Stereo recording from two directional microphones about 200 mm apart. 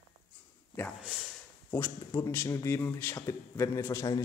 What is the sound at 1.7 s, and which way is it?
Speech, 15° left (ahead or behind).